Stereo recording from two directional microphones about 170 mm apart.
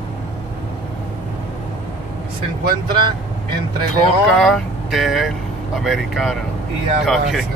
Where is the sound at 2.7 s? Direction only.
25° right (ahead or behind).